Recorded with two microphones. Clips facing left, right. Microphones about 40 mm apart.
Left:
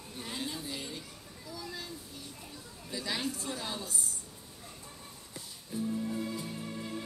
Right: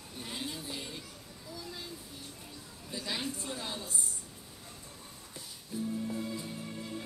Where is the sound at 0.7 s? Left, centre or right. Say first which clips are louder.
Left 1 dB; centre.